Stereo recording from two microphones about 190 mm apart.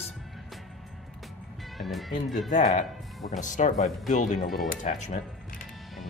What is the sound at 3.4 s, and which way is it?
Speech, 40° left (ahead or behind).